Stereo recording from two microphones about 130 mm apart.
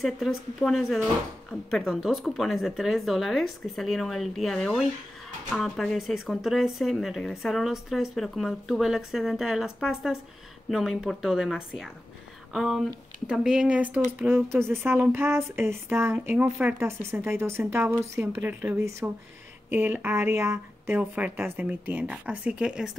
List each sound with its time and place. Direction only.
0.0 s speech: centre (ahead or behind)
10.7 s speech: centre (ahead or behind)
16.8 s speech: 20° right (ahead or behind)